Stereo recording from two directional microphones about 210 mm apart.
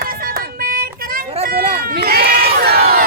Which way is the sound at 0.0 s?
45° right (ahead or behind).